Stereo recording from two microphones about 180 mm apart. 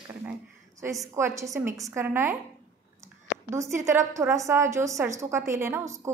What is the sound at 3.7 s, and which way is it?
A woman's voice, 15° right (ahead or behind).